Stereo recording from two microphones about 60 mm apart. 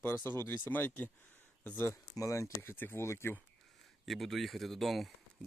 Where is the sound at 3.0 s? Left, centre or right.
Left.